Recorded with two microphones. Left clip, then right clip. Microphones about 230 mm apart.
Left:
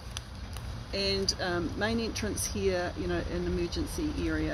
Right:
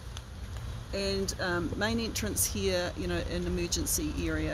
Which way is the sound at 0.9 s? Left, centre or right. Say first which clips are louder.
Left 2 dB; right.